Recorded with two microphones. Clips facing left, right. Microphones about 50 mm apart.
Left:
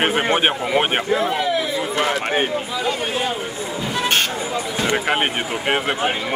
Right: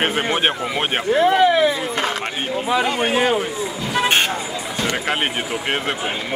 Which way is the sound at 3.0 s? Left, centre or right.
Right.